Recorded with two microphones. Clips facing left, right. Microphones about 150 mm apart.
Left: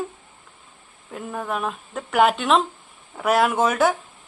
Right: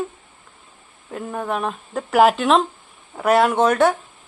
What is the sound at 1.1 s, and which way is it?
Speech, centre (ahead or behind).